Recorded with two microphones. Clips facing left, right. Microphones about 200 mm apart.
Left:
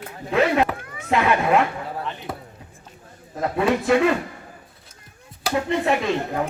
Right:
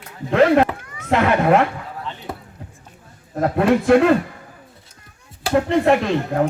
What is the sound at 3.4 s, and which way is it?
Speech, 55° right (ahead or behind).